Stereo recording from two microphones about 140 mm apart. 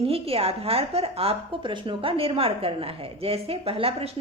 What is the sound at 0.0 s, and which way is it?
A woman's voice, 45° right (ahead or behind).